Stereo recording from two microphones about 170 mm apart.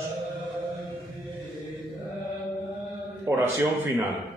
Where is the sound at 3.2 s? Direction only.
15° right (ahead or behind).